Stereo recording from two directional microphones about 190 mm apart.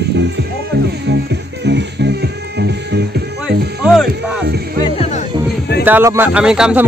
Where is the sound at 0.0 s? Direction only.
65° right (ahead or behind).